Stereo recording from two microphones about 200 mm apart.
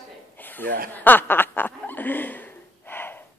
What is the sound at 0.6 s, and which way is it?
Speech, 50° right (ahead or behind).